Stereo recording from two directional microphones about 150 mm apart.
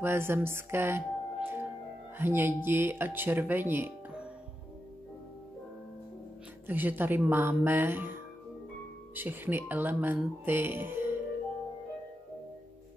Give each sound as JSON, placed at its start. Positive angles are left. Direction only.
{"t": 0.0, "sound": "speech", "side_deg": -15}
{"t": 6.7, "sound": "speech", "side_deg": -15}